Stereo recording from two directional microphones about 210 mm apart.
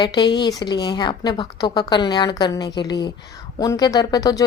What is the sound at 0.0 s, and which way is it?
A woman's voice, 20° left (ahead or behind).